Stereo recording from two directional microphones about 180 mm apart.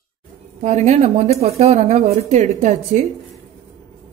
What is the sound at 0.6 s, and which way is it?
Speech, 40° right (ahead or behind).